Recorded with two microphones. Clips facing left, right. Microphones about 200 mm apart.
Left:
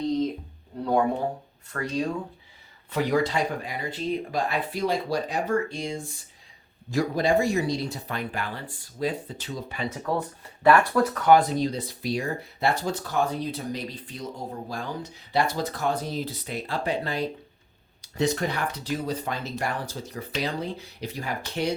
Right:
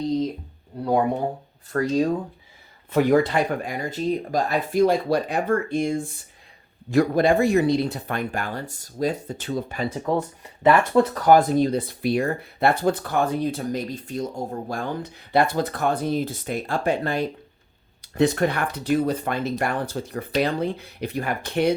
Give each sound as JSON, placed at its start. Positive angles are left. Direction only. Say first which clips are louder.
{"t": 0.7, "sound": "speech", "louder": "right 2 dB", "side_deg": -10}
{"t": 1.7, "sound": "speech", "louder": "right 7 dB", "side_deg": -40}
{"t": 2.9, "sound": "speech", "louder": "right 6 dB", "side_deg": -55}
{"t": 10.0, "sound": "speech", "louder": "right 4 dB", "side_deg": -20}
{"t": 11.2, "sound": "speech", "louder": "right 1 dB", "side_deg": -45}